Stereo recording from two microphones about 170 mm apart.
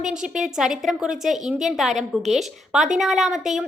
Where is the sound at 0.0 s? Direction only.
5° right (ahead or behind).